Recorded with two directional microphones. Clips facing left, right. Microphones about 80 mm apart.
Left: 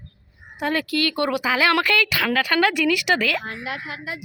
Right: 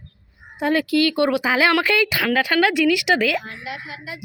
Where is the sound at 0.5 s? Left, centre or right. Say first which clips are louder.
Right 4 dB; centre.